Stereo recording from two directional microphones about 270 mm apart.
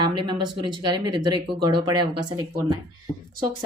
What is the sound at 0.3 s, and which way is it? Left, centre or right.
Speech, centre.